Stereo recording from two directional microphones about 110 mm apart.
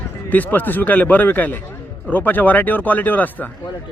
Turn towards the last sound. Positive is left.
turn(degrees=15)  # may be behind; listen again after turning